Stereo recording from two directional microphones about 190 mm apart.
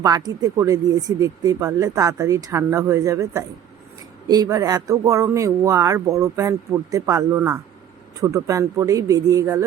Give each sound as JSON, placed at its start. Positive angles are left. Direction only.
{"t": 0.0, "sound": "speech", "side_deg": -20}